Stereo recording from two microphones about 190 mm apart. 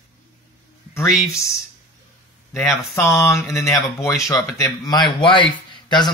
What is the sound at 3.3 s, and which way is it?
A man's voice, 15° left (ahead or behind).